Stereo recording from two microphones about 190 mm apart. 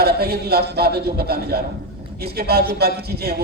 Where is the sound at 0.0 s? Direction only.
55° right (ahead or behind).